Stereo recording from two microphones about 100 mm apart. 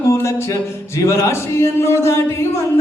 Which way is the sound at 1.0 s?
30° left (ahead or behind).